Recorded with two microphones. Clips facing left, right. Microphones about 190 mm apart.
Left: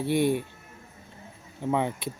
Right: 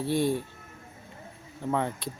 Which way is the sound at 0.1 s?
60° left (ahead or behind).